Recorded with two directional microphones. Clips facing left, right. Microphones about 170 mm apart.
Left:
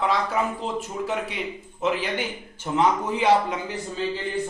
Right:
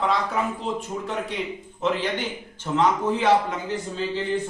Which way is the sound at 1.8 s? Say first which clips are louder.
Even; 5° left (ahead or behind).